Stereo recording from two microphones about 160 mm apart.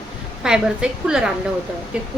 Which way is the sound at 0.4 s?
5° right (ahead or behind).